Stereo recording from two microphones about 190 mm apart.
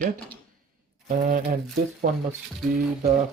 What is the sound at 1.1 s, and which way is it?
Speech, 45° right (ahead or behind).